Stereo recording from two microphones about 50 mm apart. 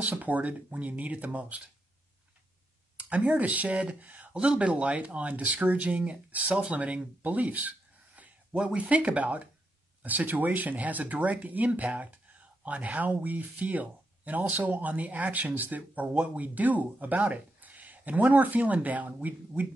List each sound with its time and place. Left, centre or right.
0.0 s speech: right
3.1 s speech: right